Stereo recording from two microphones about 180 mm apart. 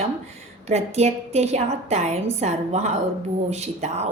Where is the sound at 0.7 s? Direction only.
35° right (ahead or behind).